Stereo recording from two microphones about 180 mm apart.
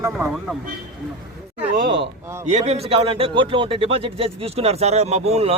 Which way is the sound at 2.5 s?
40° right (ahead or behind).